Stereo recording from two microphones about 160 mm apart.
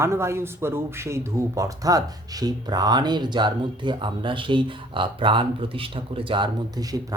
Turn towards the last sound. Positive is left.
turn(degrees=-25)  # may be behind; listen again after turning